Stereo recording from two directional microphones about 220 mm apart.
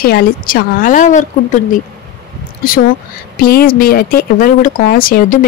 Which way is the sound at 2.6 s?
40° left (ahead or behind).